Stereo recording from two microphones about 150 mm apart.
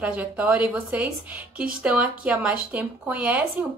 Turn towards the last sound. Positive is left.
turn(degrees=-10)  # may be behind; listen again after turning